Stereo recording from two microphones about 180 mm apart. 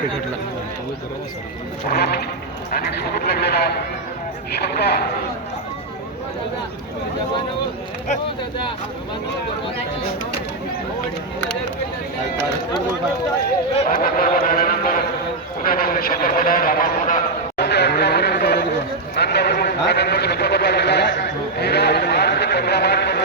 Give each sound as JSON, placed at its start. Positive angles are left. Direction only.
{"t": 1.9, "sound": "sheep", "side_deg": 65}
{"t": 2.7, "sound": "speech", "side_deg": 60}
{"t": 13.7, "sound": "a man's voice", "side_deg": 50}
{"t": 17.6, "sound": "a sound", "side_deg": 65}